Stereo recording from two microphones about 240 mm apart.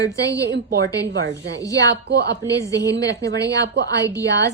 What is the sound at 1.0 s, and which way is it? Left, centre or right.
Speech, right.